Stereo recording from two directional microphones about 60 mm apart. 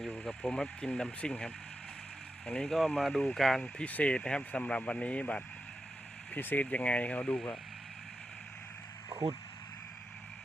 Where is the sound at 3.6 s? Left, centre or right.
Centre.